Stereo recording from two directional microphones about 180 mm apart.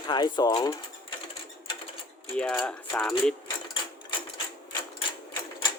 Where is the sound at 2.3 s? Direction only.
5° left (ahead or behind).